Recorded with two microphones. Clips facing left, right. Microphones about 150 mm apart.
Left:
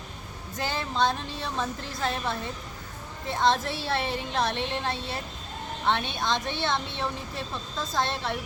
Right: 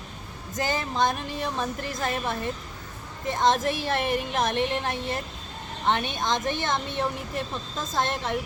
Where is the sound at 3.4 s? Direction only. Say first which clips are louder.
Right 2 dB; 15° right (ahead or behind).